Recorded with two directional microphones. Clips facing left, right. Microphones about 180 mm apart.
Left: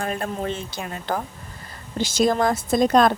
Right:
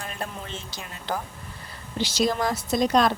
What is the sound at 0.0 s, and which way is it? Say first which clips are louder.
A woman's voice: left 9 dB; 50° left (ahead or behind).